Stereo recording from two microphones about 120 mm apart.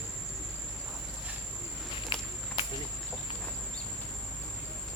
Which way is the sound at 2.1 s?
40° left (ahead or behind).